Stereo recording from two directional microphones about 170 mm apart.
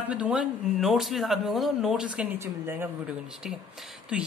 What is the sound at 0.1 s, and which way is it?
Speech, 5° right (ahead or behind).